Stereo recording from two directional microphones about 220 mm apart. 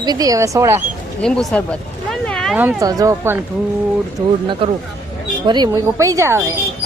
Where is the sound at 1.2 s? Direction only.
Centre (ahead or behind).